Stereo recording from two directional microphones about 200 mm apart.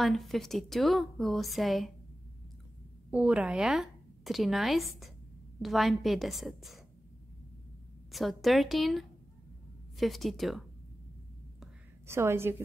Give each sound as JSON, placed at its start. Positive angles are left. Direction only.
{"t": 0.0, "sound": "a woman's voice", "side_deg": 0}
{"t": 3.1, "sound": "a woman's voice", "side_deg": -5}
{"t": 8.1, "sound": "a woman's voice", "side_deg": 0}
{"t": 12.1, "sound": "a woman's voice", "side_deg": -10}